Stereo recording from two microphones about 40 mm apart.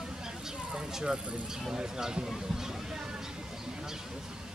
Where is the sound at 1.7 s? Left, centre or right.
Centre.